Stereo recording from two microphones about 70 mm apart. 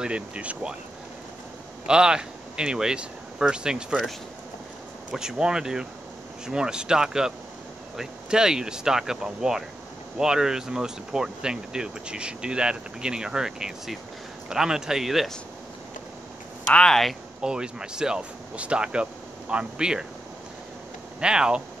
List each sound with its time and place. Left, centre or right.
0.0 s speech: centre
1.9 s speech: centre
5.1 s speech: centre
16.7 s speech: centre
17.4 s speech: centre
21.2 s speech: centre